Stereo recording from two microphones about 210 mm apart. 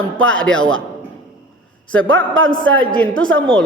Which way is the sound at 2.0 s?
65° right (ahead or behind).